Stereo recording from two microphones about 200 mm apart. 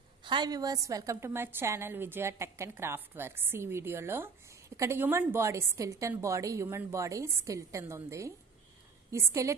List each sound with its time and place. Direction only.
0.2 s a woman's voice: 25° right (ahead or behind)